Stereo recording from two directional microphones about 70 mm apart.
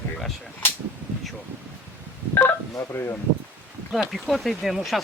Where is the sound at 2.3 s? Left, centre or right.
Left.